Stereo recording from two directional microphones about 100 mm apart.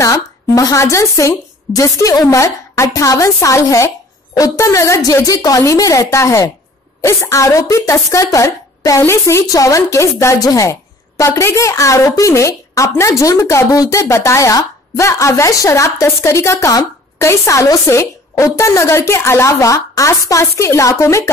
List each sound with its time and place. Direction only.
0.0 s speech: 35° left (ahead or behind)